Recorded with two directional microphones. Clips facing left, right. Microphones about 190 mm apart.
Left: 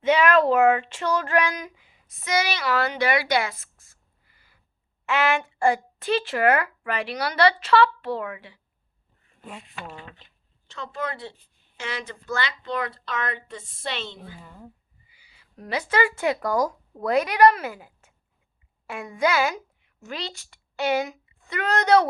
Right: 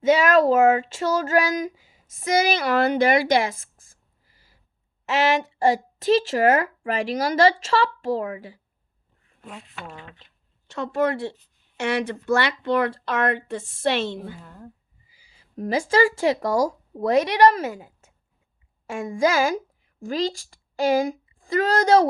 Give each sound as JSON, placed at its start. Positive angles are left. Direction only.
{"t": 0.3, "sound": "speech", "side_deg": -45}
{"t": 4.3, "sound": "a sound", "side_deg": -35}
{"t": 5.0, "sound": "a woman's voice", "side_deg": -35}
{"t": 9.4, "sound": "speech", "side_deg": 0}
{"t": 10.2, "sound": "a sound", "side_deg": 0}
{"t": 10.8, "sound": "speech", "side_deg": -65}
{"t": 14.4, "sound": "speech", "side_deg": 5}
{"t": 15.2, "sound": "a sound", "side_deg": -35}
{"t": 16.0, "sound": "a woman's voice", "side_deg": -35}